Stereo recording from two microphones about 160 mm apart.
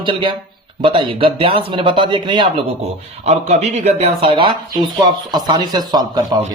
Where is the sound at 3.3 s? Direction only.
45° right (ahead or behind); by 6.2 s 25° right (ahead or behind).